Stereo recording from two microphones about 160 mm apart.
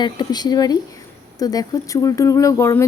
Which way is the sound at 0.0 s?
25° left (ahead or behind).